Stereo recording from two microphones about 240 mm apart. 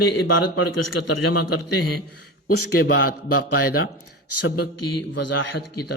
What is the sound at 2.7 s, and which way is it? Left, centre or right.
Speech, left.